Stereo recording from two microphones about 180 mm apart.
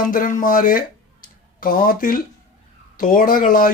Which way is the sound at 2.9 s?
50° left (ahead or behind).